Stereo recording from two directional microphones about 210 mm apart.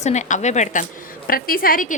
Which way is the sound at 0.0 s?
35° left (ahead or behind).